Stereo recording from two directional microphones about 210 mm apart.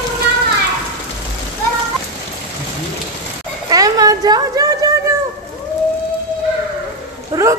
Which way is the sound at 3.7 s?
15° right (ahead or behind).